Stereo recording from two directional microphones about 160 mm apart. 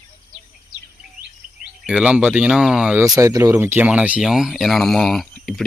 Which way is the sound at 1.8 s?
5° right (ahead or behind).